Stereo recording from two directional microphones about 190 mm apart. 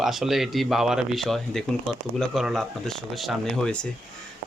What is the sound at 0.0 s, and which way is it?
Speech, centre (ahead or behind).